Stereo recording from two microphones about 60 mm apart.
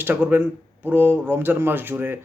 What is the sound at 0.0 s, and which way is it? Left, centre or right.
Speech, right.